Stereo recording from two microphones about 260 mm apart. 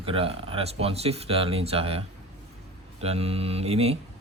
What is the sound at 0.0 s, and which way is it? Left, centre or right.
Speech, right.